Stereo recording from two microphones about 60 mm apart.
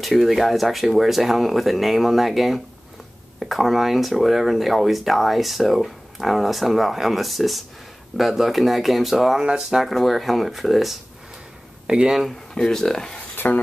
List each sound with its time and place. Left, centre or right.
0.0 s speech: centre
12.5 s speech: centre
13.4 s speech: left